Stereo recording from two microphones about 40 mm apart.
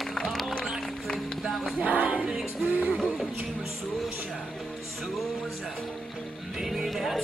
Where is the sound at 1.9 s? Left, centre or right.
Right.